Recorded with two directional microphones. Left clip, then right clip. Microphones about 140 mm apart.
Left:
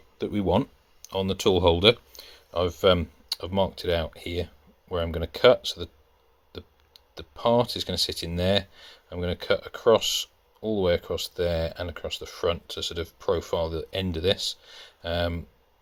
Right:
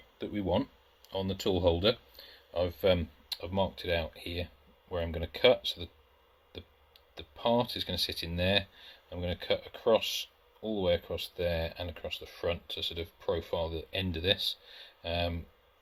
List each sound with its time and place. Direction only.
0.2 s speech: 90° left
1.1 s speech: 60° left (ahead or behind)
7.1 s speech: 50° left (ahead or behind)